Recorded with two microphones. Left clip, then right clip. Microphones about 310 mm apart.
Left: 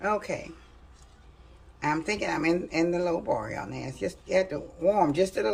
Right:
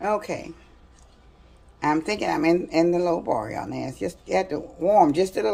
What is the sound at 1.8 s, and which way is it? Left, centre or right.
Speech, right.